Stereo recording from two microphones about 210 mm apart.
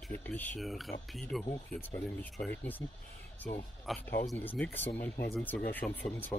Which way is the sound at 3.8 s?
5° left (ahead or behind).